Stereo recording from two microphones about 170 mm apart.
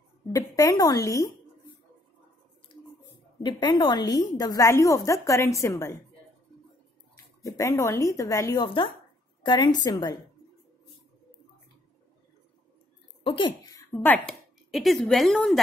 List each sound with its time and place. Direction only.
0.3 s a woman's voice: 20° left (ahead or behind)
3.4 s a woman's voice: 25° left (ahead or behind)
7.4 s a woman's voice: 20° left (ahead or behind)
8.6 s a woman's voice: 30° left (ahead or behind)
13.2 s a woman's voice: 30° left (ahead or behind); by 15.6 s centre (ahead or behind)